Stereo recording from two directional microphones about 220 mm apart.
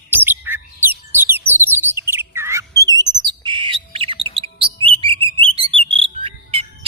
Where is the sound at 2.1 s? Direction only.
10° right (ahead or behind).